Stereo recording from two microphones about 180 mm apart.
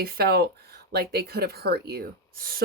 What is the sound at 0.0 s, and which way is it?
Speech, 55° right (ahead or behind).